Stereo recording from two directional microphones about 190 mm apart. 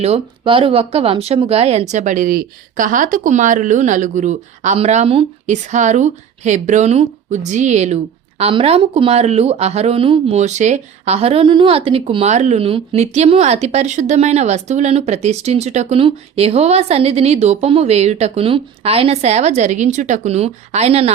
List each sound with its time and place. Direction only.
0.0 s speech: 30° right (ahead or behind)